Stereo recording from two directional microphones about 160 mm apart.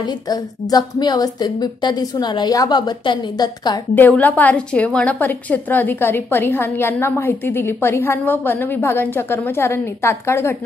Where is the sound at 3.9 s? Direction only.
10° left (ahead or behind).